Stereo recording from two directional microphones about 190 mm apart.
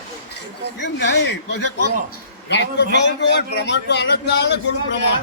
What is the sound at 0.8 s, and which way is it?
A man's voice, 65° left (ahead or behind).